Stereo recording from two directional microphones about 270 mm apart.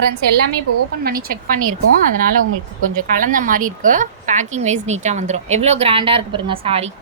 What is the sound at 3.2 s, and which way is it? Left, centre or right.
A woman's voice, right.